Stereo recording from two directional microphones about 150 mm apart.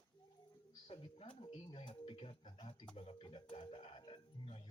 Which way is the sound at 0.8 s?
35° left (ahead or behind).